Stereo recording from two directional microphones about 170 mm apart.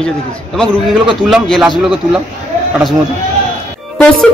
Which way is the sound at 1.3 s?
Centre (ahead or behind).